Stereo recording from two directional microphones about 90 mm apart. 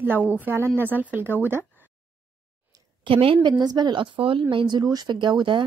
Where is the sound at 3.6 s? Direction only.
50° right (ahead or behind); by 4.4 s 70° right (ahead or behind).